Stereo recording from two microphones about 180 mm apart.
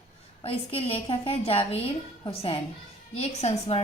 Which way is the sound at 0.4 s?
30° left (ahead or behind).